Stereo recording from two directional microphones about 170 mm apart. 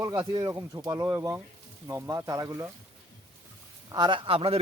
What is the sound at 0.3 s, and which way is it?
Speech, 20° right (ahead or behind).